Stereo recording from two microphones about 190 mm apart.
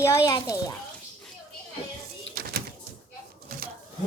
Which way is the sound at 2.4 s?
55° right (ahead or behind).